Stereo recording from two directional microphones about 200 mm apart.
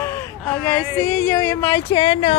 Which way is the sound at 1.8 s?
25° left (ahead or behind).